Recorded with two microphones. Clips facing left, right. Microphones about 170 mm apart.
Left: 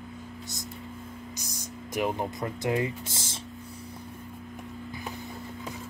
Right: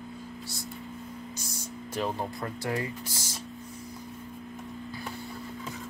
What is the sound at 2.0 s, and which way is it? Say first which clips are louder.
Speech: left 3 dB; 15° left (ahead or behind).